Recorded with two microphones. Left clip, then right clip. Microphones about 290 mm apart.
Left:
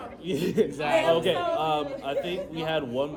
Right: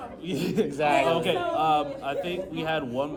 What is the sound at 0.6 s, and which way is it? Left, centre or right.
Speech, centre.